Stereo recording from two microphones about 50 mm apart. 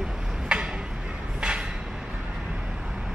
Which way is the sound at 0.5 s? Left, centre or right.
Centre.